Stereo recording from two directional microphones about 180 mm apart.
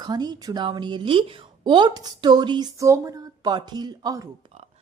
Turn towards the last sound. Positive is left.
turn(degrees=-20)  # may be behind; listen again after turning